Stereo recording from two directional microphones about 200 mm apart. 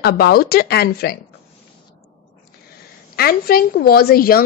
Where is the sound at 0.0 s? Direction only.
50° left (ahead or behind).